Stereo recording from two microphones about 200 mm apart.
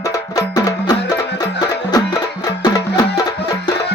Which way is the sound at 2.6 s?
20° left (ahead or behind).